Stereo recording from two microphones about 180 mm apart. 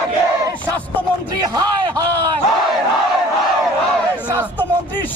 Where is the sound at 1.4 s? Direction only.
20° right (ahead or behind).